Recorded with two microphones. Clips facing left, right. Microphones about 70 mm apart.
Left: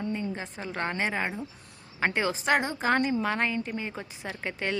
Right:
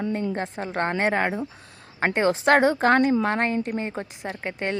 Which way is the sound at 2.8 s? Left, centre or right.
Right.